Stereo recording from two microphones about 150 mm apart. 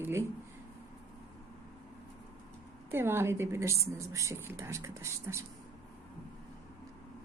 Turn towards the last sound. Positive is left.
turn(degrees=-15)  # may be behind; listen again after turning